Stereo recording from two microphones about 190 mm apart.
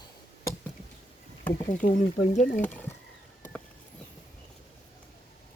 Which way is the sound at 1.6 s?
45° left (ahead or behind).